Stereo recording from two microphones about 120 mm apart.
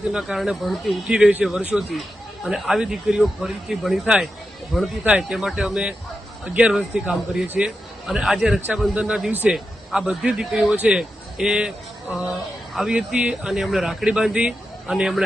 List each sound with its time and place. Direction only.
0.0 s a man's voice: 5° right (ahead or behind)